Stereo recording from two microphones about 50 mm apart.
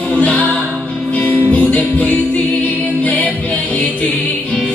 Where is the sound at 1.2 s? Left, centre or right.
Left.